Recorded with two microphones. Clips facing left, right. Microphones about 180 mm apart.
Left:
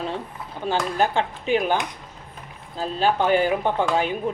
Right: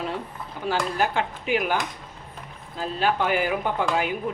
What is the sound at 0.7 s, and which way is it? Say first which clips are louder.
Speech: left 2 dB; 25° left (ahead or behind).